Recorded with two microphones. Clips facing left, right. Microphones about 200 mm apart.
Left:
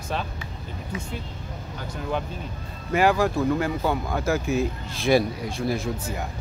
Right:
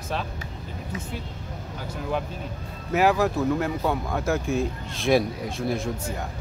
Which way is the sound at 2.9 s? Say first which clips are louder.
Even; centre (ahead or behind).